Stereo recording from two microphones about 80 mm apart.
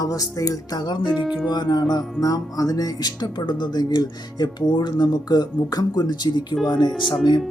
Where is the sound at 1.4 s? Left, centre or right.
Left.